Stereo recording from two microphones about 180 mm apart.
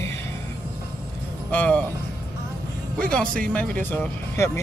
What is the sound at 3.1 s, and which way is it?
A man's voice, 5° left (ahead or behind).